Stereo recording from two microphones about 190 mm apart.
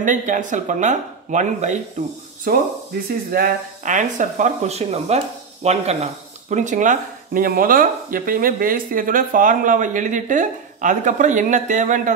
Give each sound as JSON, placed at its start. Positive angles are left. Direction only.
{"t": 0.0, "sound": "speech", "side_deg": -40}